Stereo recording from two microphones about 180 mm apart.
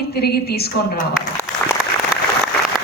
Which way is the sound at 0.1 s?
60° left (ahead or behind).